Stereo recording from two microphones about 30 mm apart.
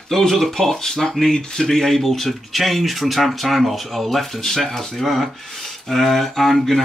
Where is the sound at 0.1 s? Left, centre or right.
Centre.